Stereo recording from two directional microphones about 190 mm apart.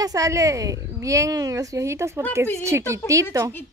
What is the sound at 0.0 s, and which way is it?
Speech, 15° right (ahead or behind).